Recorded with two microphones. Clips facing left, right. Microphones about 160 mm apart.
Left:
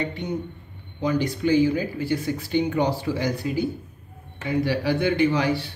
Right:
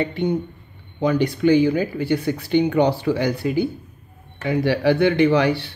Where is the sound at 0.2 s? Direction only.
60° right (ahead or behind).